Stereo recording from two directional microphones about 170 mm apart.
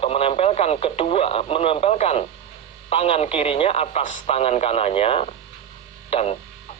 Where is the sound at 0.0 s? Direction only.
35° left (ahead or behind).